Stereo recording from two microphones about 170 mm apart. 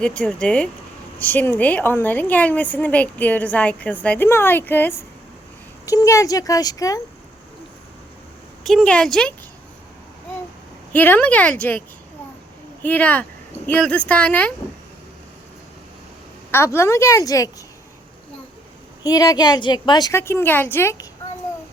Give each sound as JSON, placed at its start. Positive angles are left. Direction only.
{"t": 0.0, "sound": "a woman's voice", "side_deg": 5}
{"t": 8.6, "sound": "a woman's voice", "side_deg": 5}
{"t": 10.9, "sound": "a woman's voice", "side_deg": 10}
{"t": 12.8, "sound": "a woman's voice", "side_deg": 10}
{"t": 16.5, "sound": "a woman's voice", "side_deg": 15}
{"t": 19.0, "sound": "a woman's voice", "side_deg": 20}